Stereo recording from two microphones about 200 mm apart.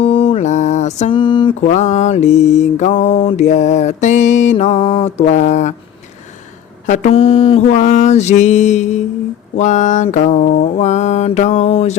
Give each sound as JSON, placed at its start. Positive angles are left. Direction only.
{"t": 0.0, "sound": "mantra", "side_deg": 25}
{"t": 1.6, "sound": "mantra", "side_deg": 40}
{"t": 6.8, "sound": "mantra", "side_deg": 35}